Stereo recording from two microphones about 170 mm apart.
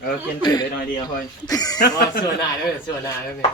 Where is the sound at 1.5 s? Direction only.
20° left (ahead or behind).